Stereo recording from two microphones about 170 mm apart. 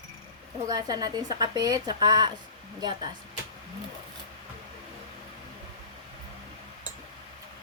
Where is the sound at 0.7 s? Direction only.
25° right (ahead or behind).